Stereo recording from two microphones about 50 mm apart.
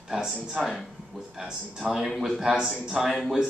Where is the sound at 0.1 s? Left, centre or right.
Centre.